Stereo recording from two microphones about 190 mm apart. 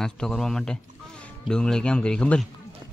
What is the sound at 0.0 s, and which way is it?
Speech, 5° left (ahead or behind).